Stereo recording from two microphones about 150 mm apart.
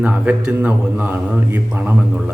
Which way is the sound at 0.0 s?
10° right (ahead or behind).